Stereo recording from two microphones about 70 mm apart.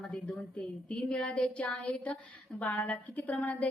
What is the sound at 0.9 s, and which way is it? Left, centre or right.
A woman's voice, centre.